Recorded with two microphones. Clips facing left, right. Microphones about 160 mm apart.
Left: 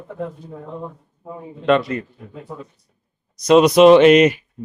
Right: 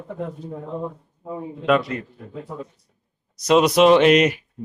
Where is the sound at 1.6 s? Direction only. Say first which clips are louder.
Left 3 dB; 5° right (ahead or behind).